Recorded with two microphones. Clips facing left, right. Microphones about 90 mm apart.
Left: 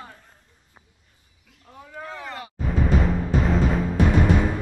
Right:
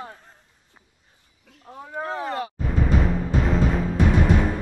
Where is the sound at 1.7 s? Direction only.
30° right (ahead or behind).